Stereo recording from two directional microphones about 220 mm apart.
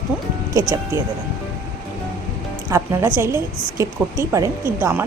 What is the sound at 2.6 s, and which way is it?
A woman's voice, 10° right (ahead or behind).